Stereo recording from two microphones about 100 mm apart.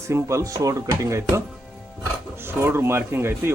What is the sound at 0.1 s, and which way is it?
Speech, 30° right (ahead or behind).